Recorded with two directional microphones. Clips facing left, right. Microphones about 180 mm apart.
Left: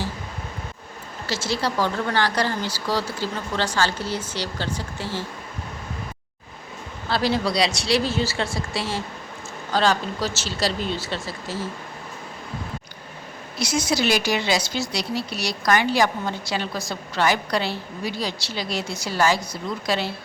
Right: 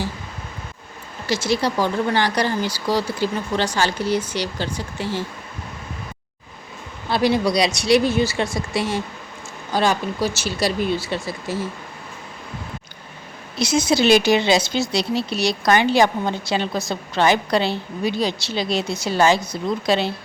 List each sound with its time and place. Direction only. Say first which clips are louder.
1.3 s speech: right 5 dB; 15° right (ahead or behind)
7.1 s speech: right 4 dB; 15° right (ahead or behind)
13.6 s speech: right 5 dB; 25° right (ahead or behind)